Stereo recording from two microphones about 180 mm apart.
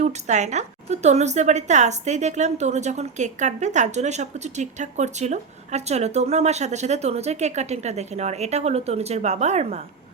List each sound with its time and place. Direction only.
0.0 s a woman's voice: 40° right (ahead or behind)